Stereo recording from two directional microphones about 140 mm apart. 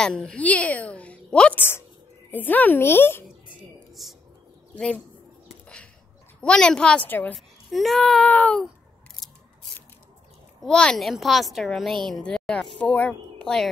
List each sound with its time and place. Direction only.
0.0 s a woman's voice: 5° left (ahead or behind)
3.3 s a sound: centre (ahead or behind)
4.7 s a woman's voice: 10° left (ahead or behind)
6.4 s a woman's voice: 5° left (ahead or behind)
7.3 s a child's voice: centre (ahead or behind)
10.6 s a child's voice: 5° left (ahead or behind)